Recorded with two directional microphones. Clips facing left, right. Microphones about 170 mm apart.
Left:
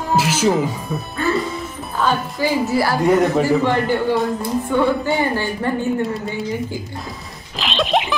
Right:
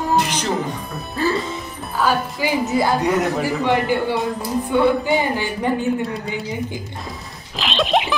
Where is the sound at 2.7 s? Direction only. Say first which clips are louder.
Even; 20° right (ahead or behind).